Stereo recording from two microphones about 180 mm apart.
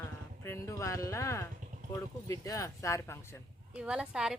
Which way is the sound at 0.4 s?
15° left (ahead or behind).